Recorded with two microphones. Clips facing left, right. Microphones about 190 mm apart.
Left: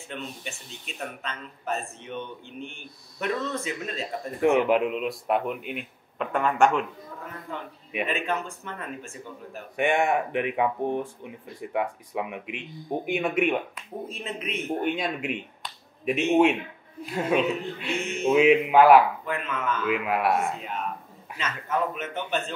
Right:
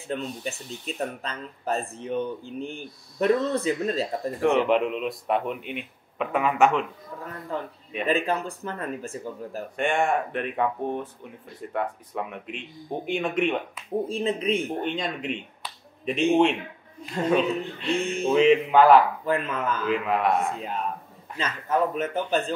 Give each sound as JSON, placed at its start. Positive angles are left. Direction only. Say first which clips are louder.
{"t": 0.1, "sound": "speech", "louder": "right 7 dB", "side_deg": -35}
{"t": 4.4, "sound": "speech", "louder": "left 1 dB", "side_deg": 10}
{"t": 7.5, "sound": "speech", "louder": "right 1 dB", "side_deg": -35}
{"t": 9.8, "sound": "speech", "louder": "left 1 dB", "side_deg": 10}
{"t": 14.0, "sound": "speech", "louder": "right 8 dB", "side_deg": -30}
{"t": 14.8, "sound": "speech", "louder": "left 1 dB", "side_deg": 10}
{"t": 19.2, "sound": "speech", "louder": "right 4 dB", "side_deg": -35}
{"t": 19.9, "sound": "speech", "louder": "right 1 dB", "side_deg": 5}
{"t": 20.5, "sound": "speech", "louder": "right 2 dB", "side_deg": -35}